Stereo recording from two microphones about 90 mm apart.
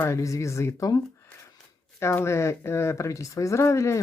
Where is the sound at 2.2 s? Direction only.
30° left (ahead or behind).